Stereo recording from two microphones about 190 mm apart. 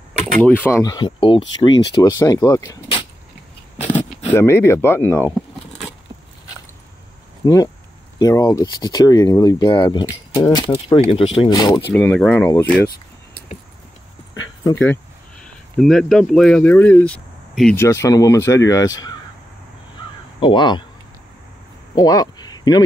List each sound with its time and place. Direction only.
0.4 s speech: 10° left (ahead or behind)
0.9 s speech: 25° left (ahead or behind)
4.3 s speech: 15° left (ahead or behind)
7.4 s speech: 20° left (ahead or behind)
11.9 s speech: 10° left (ahead or behind)
14.6 s speech: 15° left (ahead or behind)
15.8 s speech: centre (ahead or behind)
17.8 s speech: 15° left (ahead or behind)
20.3 s speech: 25° left (ahead or behind)
21.9 s a sound: 20° left (ahead or behind)